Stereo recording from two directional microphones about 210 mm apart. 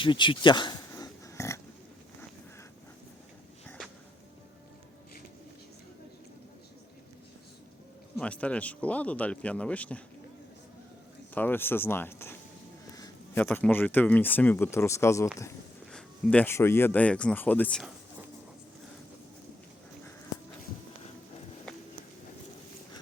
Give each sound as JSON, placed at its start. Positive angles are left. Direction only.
{"t": 0.0, "sound": "oink", "side_deg": 25}
{"t": 8.2, "sound": "speech", "side_deg": 5}
{"t": 11.3, "sound": "speech", "side_deg": 10}